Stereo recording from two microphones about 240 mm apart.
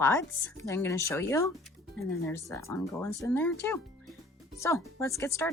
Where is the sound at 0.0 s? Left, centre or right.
Centre.